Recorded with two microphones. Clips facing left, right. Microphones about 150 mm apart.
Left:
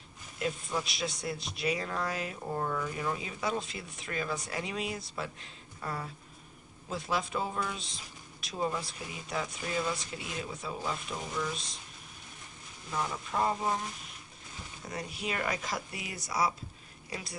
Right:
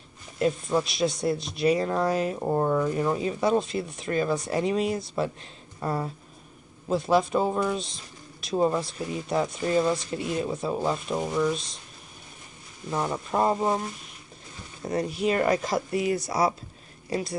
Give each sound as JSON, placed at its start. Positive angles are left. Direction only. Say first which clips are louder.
{"t": 0.4, "sound": "speech", "louder": "right 9 dB", "side_deg": -35}
{"t": 12.9, "sound": "speech", "louder": "right 7 dB", "side_deg": -40}
{"t": 14.8, "sound": "speech", "louder": "right 13 dB", "side_deg": -40}